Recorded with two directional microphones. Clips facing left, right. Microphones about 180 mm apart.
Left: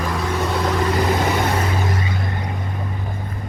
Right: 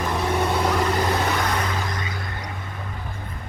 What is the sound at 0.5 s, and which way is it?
Vehicle, 5° right (ahead or behind).